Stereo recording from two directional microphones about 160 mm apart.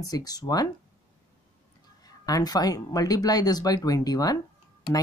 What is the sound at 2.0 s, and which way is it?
Speech, 25° left (ahead or behind).